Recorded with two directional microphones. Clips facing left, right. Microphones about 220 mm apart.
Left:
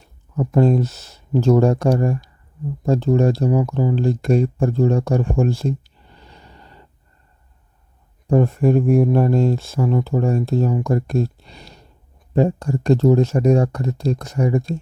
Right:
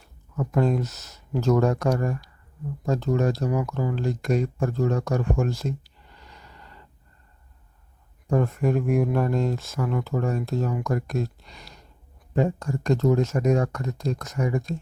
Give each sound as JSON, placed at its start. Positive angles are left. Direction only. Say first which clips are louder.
{"t": 0.3, "sound": "speech", "louder": "left 7 dB", "side_deg": 30}
{"t": 8.3, "sound": "speech", "louder": "left 7 dB", "side_deg": 30}